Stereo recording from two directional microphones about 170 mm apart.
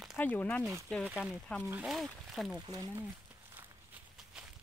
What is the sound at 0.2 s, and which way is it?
Speech, 10° left (ahead or behind).